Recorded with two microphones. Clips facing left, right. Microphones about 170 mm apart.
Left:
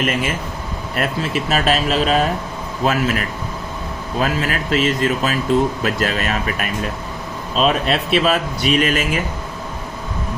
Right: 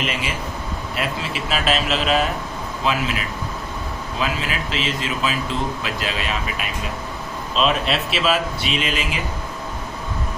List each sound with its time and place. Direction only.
0.0 s speech: 50° left (ahead or behind)